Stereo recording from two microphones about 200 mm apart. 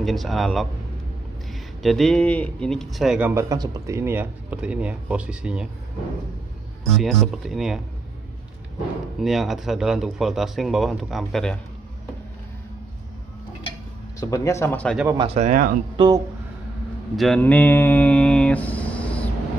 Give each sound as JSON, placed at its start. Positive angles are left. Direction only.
{"t": 0.0, "sound": "speech", "side_deg": 0}
{"t": 1.8, "sound": "speech", "side_deg": 0}
{"t": 7.0, "sound": "speech", "side_deg": 0}
{"t": 9.2, "sound": "speech", "side_deg": 0}
{"t": 14.2, "sound": "speech", "side_deg": 15}
{"t": 15.1, "sound": "speech", "side_deg": -30}
{"t": 16.0, "sound": "speech", "side_deg": -25}
{"t": 17.2, "sound": "a sound", "side_deg": 5}